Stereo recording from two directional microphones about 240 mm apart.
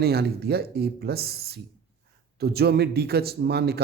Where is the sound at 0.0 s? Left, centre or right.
Right.